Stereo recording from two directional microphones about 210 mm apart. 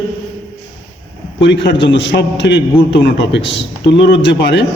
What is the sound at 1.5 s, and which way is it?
A man's voice, 60° left (ahead or behind).